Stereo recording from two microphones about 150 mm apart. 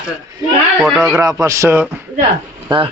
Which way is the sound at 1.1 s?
20° right (ahead or behind).